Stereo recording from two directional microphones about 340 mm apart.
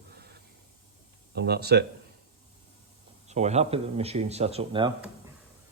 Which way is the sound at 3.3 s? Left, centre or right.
Centre.